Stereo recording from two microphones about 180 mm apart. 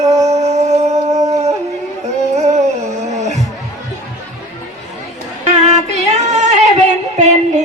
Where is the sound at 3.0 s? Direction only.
40° right (ahead or behind).